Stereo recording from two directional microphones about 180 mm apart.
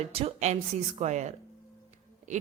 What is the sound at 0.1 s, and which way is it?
A woman's voice, 35° right (ahead or behind).